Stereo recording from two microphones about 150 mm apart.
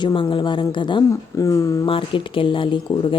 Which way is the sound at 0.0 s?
35° left (ahead or behind).